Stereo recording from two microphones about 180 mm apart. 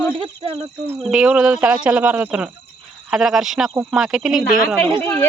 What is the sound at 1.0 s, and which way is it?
Speech, 5° right (ahead or behind).